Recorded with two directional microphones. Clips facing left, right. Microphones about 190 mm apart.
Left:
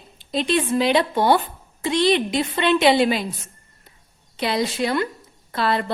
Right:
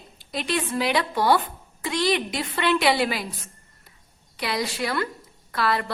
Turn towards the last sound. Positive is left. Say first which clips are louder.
# left 3 dB
turn(degrees=25)  # may be behind; listen again after turning